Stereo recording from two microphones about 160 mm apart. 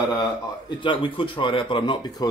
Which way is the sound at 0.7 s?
30° left (ahead or behind).